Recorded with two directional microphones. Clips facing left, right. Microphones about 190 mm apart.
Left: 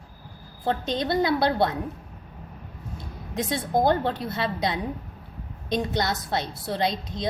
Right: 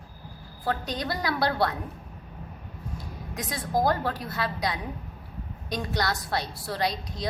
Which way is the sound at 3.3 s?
25° left (ahead or behind).